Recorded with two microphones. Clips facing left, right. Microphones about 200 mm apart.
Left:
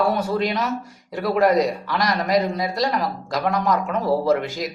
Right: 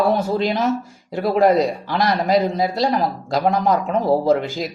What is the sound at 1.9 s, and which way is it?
Speech, 25° right (ahead or behind).